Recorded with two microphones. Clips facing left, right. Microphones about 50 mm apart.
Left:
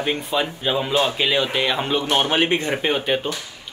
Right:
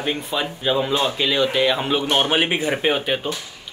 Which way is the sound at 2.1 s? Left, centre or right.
Centre.